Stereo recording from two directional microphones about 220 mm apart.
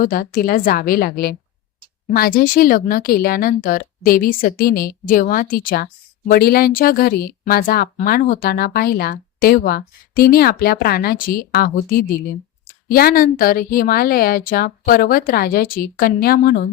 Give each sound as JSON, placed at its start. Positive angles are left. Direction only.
{"t": 0.0, "sound": "speech", "side_deg": 40}